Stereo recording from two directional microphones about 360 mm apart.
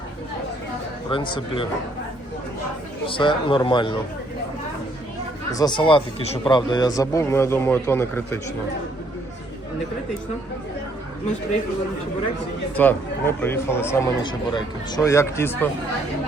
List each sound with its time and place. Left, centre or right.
1.1 s speech: centre
3.1 s speech: centre
5.5 s speech: centre
12.7 s speech: centre